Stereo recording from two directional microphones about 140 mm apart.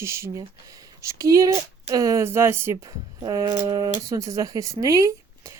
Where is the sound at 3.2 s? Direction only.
30° right (ahead or behind).